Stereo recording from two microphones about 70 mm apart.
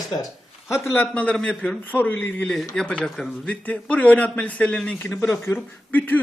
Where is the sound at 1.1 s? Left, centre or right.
Centre.